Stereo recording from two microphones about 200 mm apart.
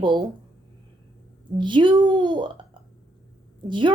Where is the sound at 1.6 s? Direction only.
25° right (ahead or behind).